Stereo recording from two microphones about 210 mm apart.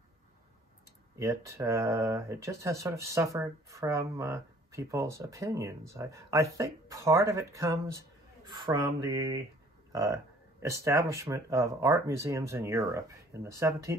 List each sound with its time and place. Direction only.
1.1 s speech: 15° right (ahead or behind)